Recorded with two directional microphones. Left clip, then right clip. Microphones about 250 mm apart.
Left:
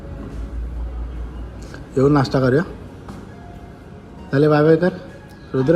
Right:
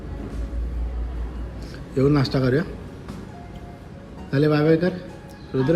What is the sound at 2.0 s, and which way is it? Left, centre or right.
Speech, centre.